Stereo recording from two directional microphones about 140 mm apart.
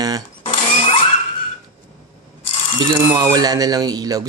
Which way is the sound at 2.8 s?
30° right (ahead or behind).